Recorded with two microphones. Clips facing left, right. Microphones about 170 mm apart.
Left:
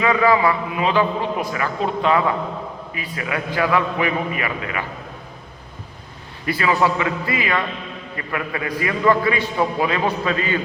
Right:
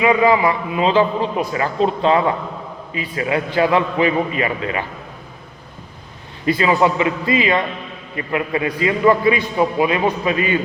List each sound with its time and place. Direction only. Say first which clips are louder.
0.0 s a man's voice: right 2 dB; 20° right (ahead or behind)
6.4 s a man's voice: right 3 dB; 20° right (ahead or behind)